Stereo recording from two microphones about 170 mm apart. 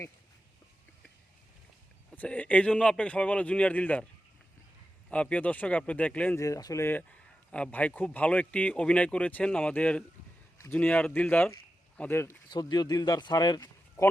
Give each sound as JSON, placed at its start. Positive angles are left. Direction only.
{"t": 2.1, "sound": "a man's voice", "side_deg": 10}
{"t": 5.1, "sound": "a man's voice", "side_deg": 10}
{"t": 6.4, "sound": "a man's voice", "side_deg": 20}
{"t": 12.5, "sound": "speech", "side_deg": 25}